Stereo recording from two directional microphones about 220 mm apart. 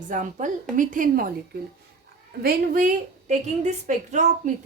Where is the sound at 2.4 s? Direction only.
40° right (ahead or behind).